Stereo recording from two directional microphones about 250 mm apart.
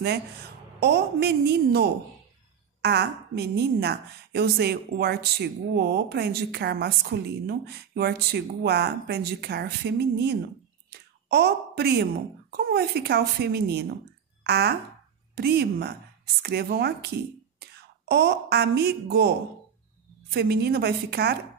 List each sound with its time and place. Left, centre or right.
0.0 s a woman's voice: right
18.1 s a woman's voice: right
20.3 s a woman's voice: right